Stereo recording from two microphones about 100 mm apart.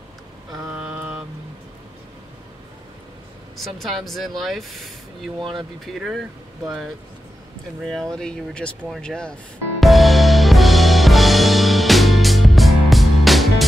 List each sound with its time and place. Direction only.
0.7 s mantra: 15° right (ahead or behind)
3.5 s speech: centre (ahead or behind)
5.4 s speech: 55° right (ahead or behind)
5.9 s speech: 5° right (ahead or behind)
7.8 s speech: 5° left (ahead or behind)
9.8 s music: centre (ahead or behind)